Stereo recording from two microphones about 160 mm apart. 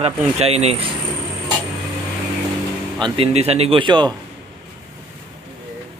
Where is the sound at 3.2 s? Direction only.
40° right (ahead or behind).